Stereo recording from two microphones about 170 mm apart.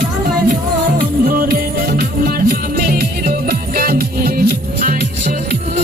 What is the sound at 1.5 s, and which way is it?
Music, 65° right (ahead or behind).